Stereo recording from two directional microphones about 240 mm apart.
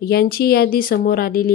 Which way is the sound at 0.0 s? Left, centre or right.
Left.